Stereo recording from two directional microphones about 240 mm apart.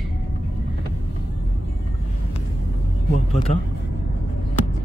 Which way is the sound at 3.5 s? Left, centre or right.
Left.